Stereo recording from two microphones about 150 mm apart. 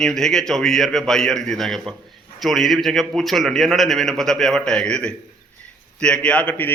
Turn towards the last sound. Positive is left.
turn(degrees=10)  # may be behind; listen again after turning